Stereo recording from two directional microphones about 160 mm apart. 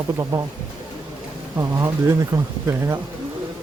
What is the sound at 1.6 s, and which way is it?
Speech, 20° right (ahead or behind).